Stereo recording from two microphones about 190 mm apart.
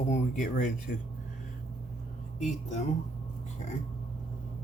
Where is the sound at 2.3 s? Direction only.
40° left (ahead or behind).